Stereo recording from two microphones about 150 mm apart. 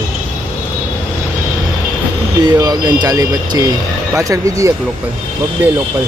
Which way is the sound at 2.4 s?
25° right (ahead or behind).